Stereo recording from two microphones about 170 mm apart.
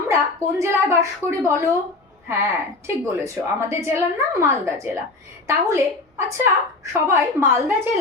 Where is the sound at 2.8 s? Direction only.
15° right (ahead or behind).